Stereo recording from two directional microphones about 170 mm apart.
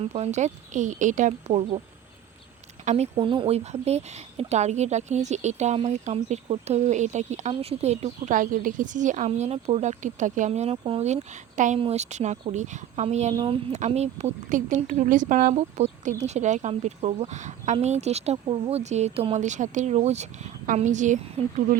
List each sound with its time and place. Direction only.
0.0 s speech: 40° right (ahead or behind)
2.8 s speech: 40° right (ahead or behind)
13.3 s speech: 30° right (ahead or behind); by 15.5 s 50° right (ahead or behind)
15.5 s speech: 40° right (ahead or behind)